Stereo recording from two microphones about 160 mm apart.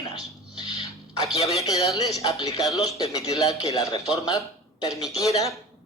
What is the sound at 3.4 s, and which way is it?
Speech, 20° left (ahead or behind).